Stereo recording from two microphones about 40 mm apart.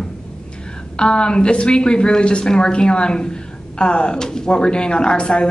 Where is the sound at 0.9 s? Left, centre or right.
Left.